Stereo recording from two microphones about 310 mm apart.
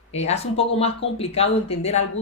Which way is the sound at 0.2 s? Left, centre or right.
Centre.